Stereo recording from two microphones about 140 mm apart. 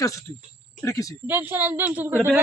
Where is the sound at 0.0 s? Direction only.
25° left (ahead or behind).